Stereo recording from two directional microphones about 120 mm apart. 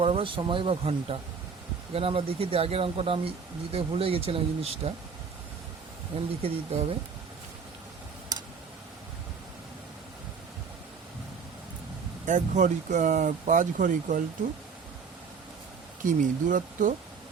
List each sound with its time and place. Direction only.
0.0 s speech: 45° right (ahead or behind)
6.4 s speech: 55° right (ahead or behind)
12.2 s speech: 90° right
16.0 s speech: 90° right